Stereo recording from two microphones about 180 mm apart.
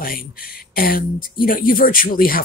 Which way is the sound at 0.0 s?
55° left (ahead or behind).